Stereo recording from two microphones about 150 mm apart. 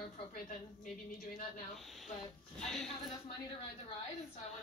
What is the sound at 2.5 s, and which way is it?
Speech, 5° left (ahead or behind).